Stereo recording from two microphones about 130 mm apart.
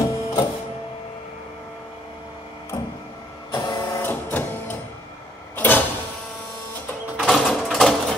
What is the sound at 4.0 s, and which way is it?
Printer, 15° left (ahead or behind).